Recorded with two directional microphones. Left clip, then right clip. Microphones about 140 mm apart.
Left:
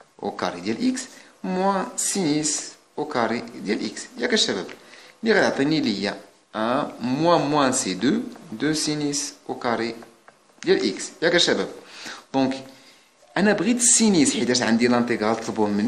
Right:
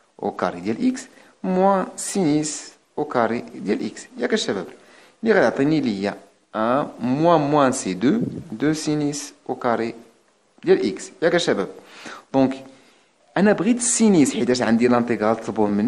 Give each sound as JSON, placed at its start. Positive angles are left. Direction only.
{"t": 0.2, "sound": "speech", "side_deg": -50}